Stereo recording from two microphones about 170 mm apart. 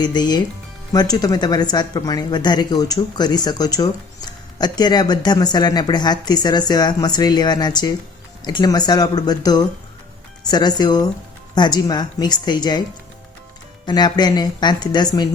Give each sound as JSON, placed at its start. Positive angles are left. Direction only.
{"t": 0.0, "sound": "speech", "side_deg": 25}
{"t": 13.8, "sound": "speech", "side_deg": 25}